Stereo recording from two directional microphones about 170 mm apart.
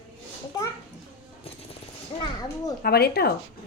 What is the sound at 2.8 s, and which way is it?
Speech, 65° left (ahead or behind).